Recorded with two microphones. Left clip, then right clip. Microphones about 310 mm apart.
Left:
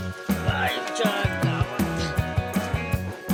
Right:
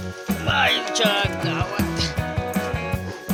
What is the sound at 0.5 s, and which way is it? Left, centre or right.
Music, right.